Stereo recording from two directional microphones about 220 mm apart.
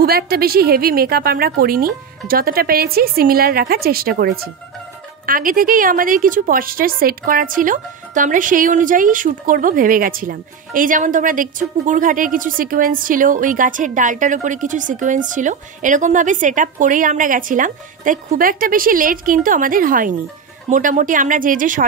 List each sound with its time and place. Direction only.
0.0 s a woman's voice: 45° right (ahead or behind)